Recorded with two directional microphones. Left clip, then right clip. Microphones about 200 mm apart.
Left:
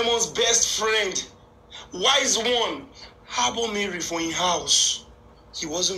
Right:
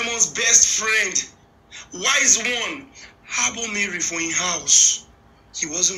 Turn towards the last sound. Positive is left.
turn(degrees=-10)  # may be behind; listen again after turning